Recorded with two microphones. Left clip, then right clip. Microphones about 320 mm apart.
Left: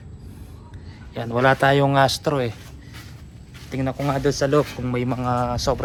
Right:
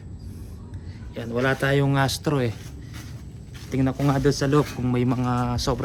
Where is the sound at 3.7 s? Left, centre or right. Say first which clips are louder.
Even; centre.